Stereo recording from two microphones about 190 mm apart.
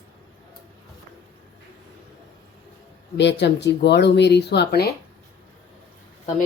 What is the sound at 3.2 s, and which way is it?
Speech, 65° left (ahead or behind).